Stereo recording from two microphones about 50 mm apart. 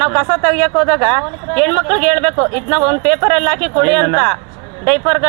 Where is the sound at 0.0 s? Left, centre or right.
Centre.